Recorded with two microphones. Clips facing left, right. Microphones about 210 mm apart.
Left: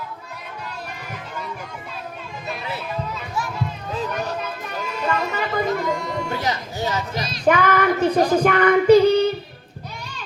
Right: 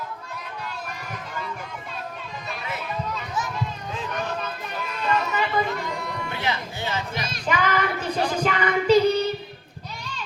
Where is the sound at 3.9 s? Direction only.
40° left (ahead or behind).